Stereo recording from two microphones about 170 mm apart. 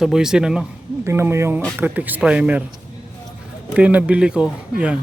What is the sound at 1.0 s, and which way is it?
Speech, 15° right (ahead or behind).